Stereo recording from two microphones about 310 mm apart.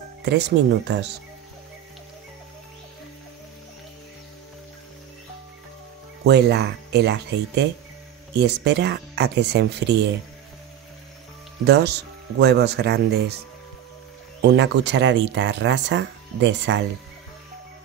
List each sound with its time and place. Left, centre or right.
0.2 s speech: right
6.2 s speech: right
11.6 s speech: right
14.5 s speech: right